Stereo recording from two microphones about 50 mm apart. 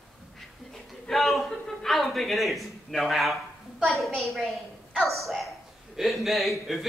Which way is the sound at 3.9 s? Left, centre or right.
Centre.